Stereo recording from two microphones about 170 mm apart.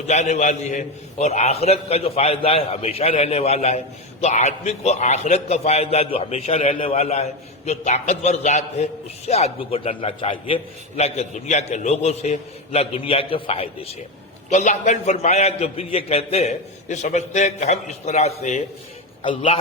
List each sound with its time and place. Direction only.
0.1 s a man's voice: 45° left (ahead or behind)